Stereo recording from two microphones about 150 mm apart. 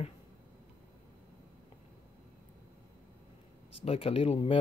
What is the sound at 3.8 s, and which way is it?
Speech, 40° left (ahead or behind).